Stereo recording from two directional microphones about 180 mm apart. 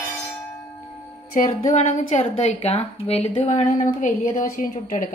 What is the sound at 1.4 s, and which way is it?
Music, 45° left (ahead or behind).